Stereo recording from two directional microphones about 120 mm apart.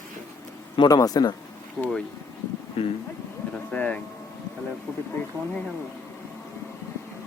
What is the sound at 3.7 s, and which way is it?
Speech, 10° left (ahead or behind).